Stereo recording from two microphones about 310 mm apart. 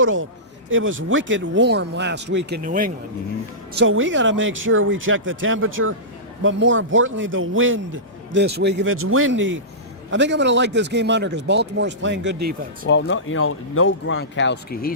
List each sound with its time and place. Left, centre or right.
0.0 s a man's voice: right
3.8 s a man's voice: right
12.9 s speech: left